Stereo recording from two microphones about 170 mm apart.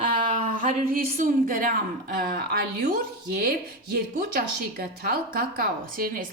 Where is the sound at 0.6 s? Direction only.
55° right (ahead or behind).